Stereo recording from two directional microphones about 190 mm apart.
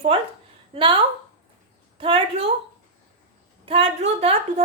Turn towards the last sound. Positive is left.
turn(degrees=-30)  # may be behind; listen again after turning